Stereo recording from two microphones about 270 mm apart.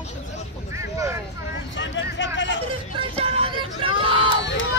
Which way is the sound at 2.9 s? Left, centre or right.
Right.